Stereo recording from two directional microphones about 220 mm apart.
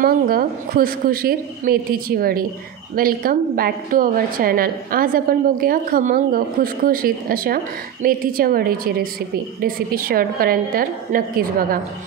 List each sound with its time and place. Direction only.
0.0 s a woman's voice: 40° right (ahead or behind)